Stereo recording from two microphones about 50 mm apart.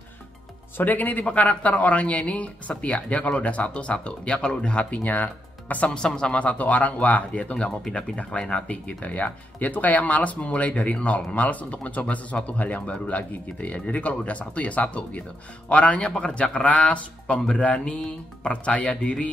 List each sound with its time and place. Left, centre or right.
0.7 s speech: left
5.9 s speech: centre
16.6 s speech: left